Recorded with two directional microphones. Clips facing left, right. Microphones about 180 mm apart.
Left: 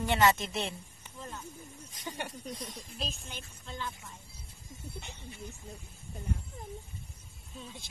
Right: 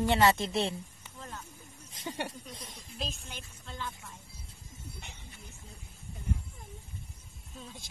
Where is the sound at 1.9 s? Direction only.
25° right (ahead or behind).